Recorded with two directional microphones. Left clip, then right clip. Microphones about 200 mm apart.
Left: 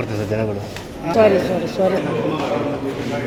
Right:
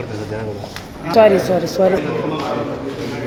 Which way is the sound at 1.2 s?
15° right (ahead or behind).